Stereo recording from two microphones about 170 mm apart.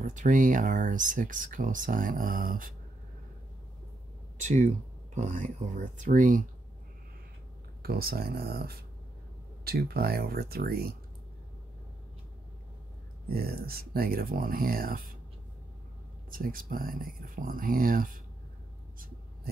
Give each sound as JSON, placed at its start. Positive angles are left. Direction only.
{"t": 0.0, "sound": "speech", "side_deg": -50}
{"t": 4.4, "sound": "speech", "side_deg": -45}
{"t": 7.8, "sound": "speech", "side_deg": -65}
{"t": 13.3, "sound": "speech", "side_deg": -65}
{"t": 16.3, "sound": "speech", "side_deg": -55}